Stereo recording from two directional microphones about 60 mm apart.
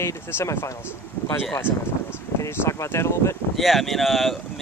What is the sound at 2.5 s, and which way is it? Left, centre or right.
Speech, left.